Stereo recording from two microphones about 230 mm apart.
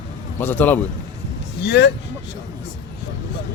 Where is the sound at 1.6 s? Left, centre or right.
Left.